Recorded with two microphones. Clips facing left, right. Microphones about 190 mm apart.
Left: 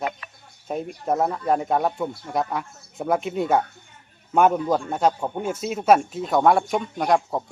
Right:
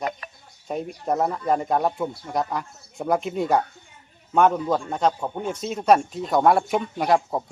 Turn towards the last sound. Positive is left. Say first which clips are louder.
# even
turn(degrees=-5)  # may be behind; listen again after turning